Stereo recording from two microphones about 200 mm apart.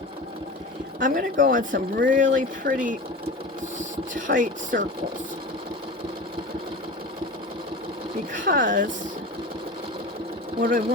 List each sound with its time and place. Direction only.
0.9 s speech: 40° right (ahead or behind)
8.3 s speech: 40° right (ahead or behind)
10.6 s speech: 45° right (ahead or behind)